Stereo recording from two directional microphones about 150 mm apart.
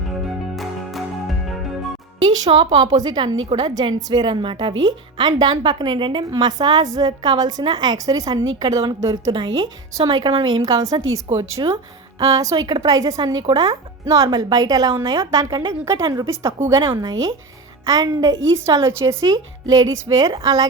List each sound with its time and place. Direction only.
0.5 s music: centre (ahead or behind)
2.2 s a woman's voice: 30° right (ahead or behind)